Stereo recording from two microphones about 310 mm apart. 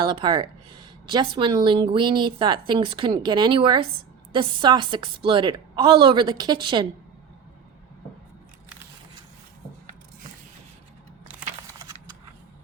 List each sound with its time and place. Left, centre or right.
0.0 s speech: centre